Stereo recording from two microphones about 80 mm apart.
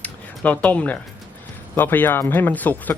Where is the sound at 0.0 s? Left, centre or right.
Centre.